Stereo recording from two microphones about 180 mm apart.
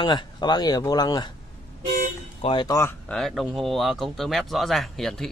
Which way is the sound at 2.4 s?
25° left (ahead or behind).